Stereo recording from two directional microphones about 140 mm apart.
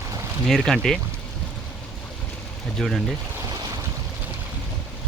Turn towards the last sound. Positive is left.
turn(degrees=0)  # may be behind; listen again after turning